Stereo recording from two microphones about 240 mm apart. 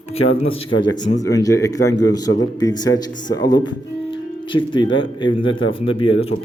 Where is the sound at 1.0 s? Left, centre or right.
Left.